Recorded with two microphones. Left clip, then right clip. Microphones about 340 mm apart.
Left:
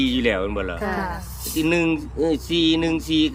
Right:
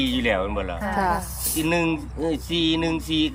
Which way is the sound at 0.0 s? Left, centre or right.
Centre.